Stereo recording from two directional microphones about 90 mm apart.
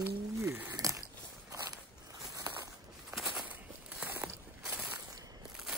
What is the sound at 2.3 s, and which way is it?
Walk, 40° right (ahead or behind).